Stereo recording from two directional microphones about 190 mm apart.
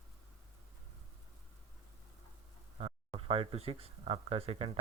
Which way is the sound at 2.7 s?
30° right (ahead or behind).